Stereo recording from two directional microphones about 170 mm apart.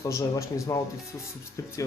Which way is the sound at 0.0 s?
20° left (ahead or behind).